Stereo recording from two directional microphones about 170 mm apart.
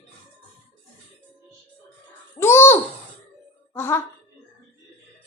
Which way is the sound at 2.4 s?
15° left (ahead or behind).